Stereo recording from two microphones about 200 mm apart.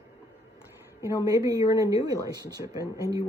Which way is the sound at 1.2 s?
15° right (ahead or behind).